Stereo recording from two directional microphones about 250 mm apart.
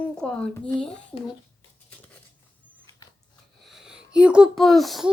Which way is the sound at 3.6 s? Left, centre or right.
Centre.